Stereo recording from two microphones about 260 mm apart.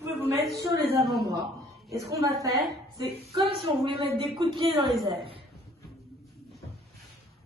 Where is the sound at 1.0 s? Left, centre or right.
Centre.